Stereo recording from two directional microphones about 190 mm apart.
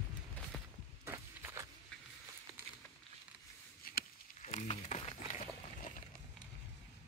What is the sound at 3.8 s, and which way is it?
Chop, 50° left (ahead or behind).